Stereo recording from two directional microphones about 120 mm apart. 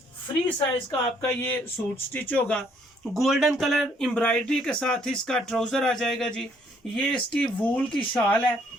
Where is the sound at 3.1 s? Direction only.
Centre (ahead or behind).